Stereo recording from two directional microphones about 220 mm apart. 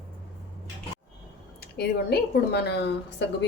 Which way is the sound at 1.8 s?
45° left (ahead or behind).